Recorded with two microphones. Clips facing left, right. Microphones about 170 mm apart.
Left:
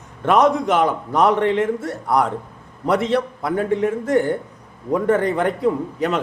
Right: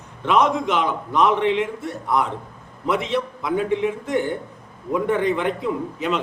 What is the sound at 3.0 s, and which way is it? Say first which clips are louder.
A man's voice: left 4 dB; 45° left (ahead or behind).